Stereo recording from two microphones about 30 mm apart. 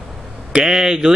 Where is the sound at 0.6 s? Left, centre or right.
Centre.